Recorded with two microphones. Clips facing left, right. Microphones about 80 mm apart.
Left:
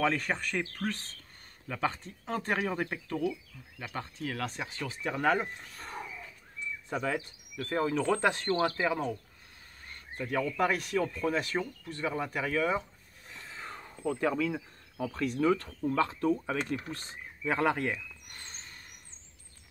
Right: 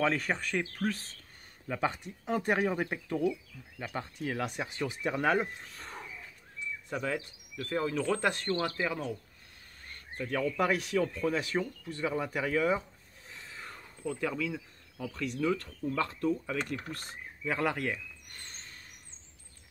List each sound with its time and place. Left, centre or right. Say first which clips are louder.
0.0 s speech: even; centre
1.7 s speech: even; centre
5.3 s speech: even; centre
6.9 s speech: left 2 dB; left
9.9 s a sound: left 1 dB; centre
10.5 s speech: right 1 dB; centre
13.6 s a sound: left 5 dB; left
15.0 s speech: left 3 dB; left
16.0 s speech: left 3 dB; left
17.6 s speech: left 3 dB; left